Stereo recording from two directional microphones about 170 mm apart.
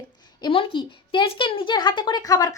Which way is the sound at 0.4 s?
25° left (ahead or behind).